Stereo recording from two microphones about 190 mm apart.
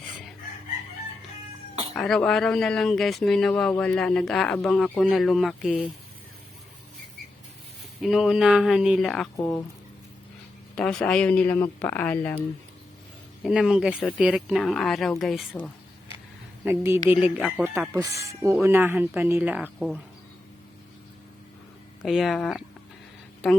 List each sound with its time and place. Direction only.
1.9 s speech: 5° left (ahead or behind)
8.0 s speech: centre (ahead or behind)
10.8 s speech: 5° left (ahead or behind)
13.4 s speech: 5° right (ahead or behind)
16.6 s speech: 15° right (ahead or behind)
22.0 s speech: centre (ahead or behind)